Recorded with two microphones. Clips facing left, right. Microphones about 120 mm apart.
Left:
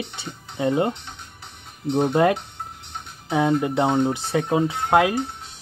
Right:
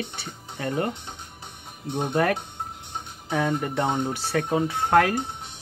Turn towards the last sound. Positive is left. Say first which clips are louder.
# left 1 dB
turn(degrees=15)  # may be behind; listen again after turning